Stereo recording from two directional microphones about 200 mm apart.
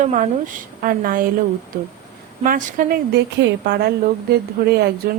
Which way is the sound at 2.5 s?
40° right (ahead or behind).